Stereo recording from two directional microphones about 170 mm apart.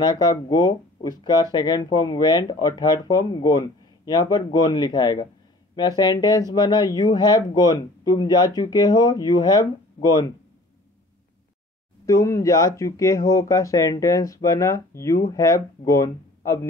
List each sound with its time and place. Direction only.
0.0 s speech: 25° left (ahead or behind)
12.1 s speech: 15° left (ahead or behind)